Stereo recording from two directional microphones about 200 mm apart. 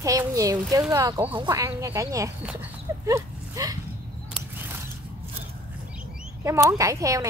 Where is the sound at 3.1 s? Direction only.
15° right (ahead or behind).